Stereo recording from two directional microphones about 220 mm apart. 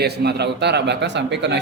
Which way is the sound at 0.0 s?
50° right (ahead or behind).